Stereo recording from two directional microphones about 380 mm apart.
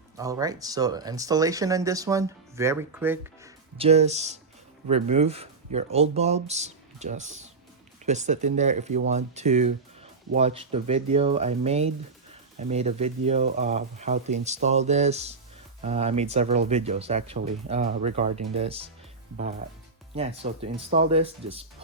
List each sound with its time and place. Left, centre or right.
0.2 s speech: centre
20.1 s speech: centre